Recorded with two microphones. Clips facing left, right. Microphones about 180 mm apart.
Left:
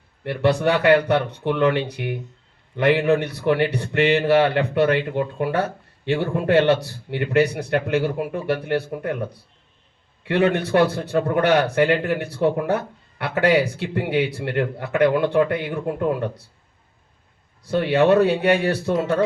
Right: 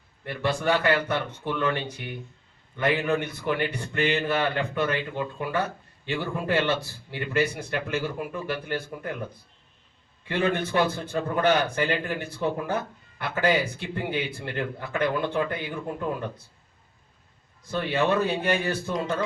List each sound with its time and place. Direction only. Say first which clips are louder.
0.4 s a man's voice: left 6 dB; 65° left (ahead or behind)
17.7 s a man's voice: left 8 dB; 70° left (ahead or behind)